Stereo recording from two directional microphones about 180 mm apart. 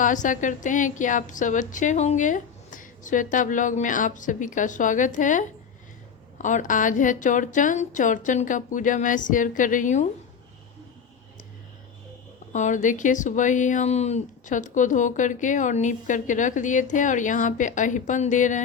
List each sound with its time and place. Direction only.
0.0 s speech: 45° left (ahead or behind)
12.5 s speech: 45° left (ahead or behind)